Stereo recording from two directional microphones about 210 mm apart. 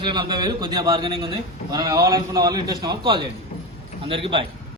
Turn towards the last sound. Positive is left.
turn(degrees=-25)  # may be behind; listen again after turning